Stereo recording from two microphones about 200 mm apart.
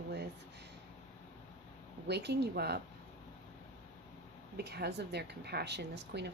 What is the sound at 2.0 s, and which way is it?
Speech, 55° right (ahead or behind).